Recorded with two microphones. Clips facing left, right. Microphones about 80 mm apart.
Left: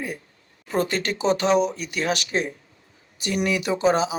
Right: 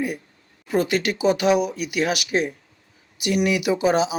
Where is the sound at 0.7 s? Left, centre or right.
Centre.